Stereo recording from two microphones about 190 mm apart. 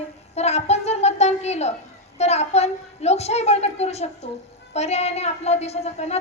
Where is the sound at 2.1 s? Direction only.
35° left (ahead or behind).